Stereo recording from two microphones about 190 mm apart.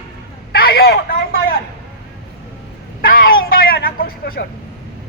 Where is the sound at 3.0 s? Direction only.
45° left (ahead or behind).